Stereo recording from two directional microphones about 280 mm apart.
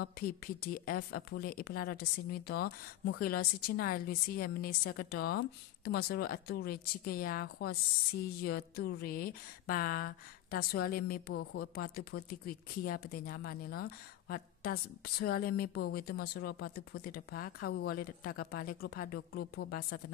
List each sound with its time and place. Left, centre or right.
0.0 s speech: left